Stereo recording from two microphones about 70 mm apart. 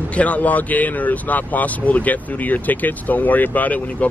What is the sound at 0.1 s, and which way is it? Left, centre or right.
Speech, left.